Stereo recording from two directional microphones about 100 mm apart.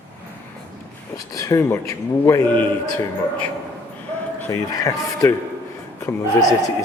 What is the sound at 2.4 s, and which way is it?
Speech, 15° left (ahead or behind).